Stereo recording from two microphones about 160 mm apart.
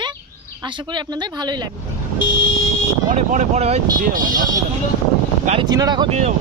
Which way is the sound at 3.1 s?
45° right (ahead or behind).